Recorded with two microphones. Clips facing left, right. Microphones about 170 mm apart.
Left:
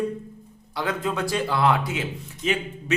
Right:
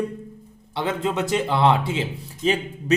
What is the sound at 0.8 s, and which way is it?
Speech, 25° right (ahead or behind).